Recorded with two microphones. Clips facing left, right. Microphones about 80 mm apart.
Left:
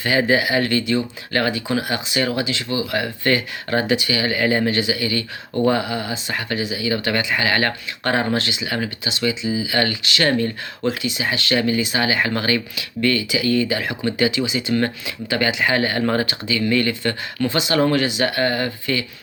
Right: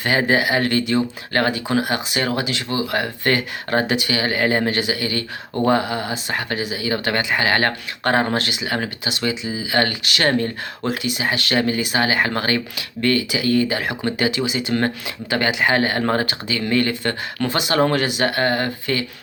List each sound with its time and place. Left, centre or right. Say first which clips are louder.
0.0 s speech: even; right
5.8 s speech: right 1 dB; right
10.8 s speech: even; right